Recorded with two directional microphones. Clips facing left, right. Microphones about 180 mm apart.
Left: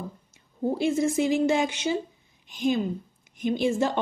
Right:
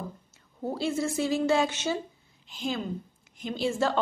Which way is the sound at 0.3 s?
15° left (ahead or behind).